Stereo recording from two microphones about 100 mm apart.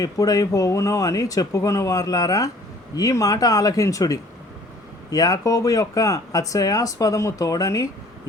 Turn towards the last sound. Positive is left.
turn(degrees=35)  # may be behind; listen again after turning